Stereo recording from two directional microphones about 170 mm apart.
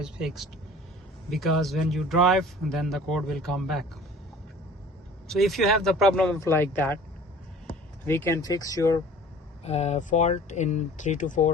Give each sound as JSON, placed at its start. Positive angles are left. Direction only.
{"t": 0.0, "sound": "speech", "side_deg": -5}
{"t": 5.3, "sound": "speech", "side_deg": 0}
{"t": 8.0, "sound": "speech", "side_deg": 15}
{"t": 9.6, "sound": "speech", "side_deg": 40}